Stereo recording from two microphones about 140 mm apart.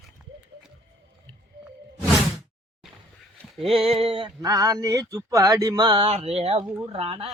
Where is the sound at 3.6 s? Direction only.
45° right (ahead or behind).